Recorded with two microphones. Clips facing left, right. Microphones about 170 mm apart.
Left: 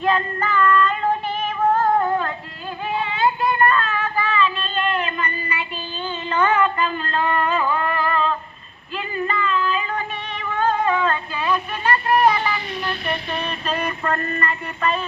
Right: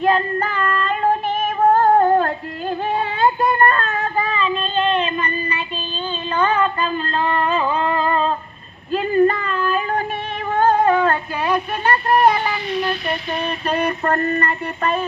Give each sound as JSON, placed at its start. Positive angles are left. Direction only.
{"t": 0.3, "sound": "child singing", "side_deg": -40}
{"t": 1.5, "sound": "female singing", "side_deg": -40}
{"t": 2.0, "sound": "music", "side_deg": -45}
{"t": 8.9, "sound": "female singing", "side_deg": -45}
{"t": 10.7, "sound": "music", "side_deg": -45}
{"t": 12.2, "sound": "music", "side_deg": -45}
{"t": 13.8, "sound": "mantra", "side_deg": -40}